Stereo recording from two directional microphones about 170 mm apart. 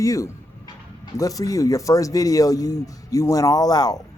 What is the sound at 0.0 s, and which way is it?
Speech, 20° left (ahead or behind).